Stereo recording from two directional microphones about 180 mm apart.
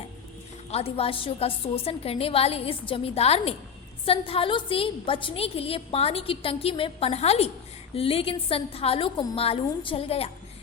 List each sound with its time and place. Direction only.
0.7 s a woman's voice: 35° left (ahead or behind)